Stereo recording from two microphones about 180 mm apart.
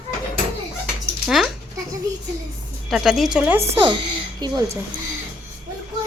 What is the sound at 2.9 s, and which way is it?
Speech, centre (ahead or behind).